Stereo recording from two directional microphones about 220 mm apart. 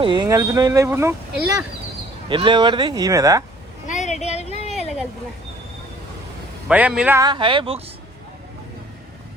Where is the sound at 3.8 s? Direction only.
35° left (ahead or behind).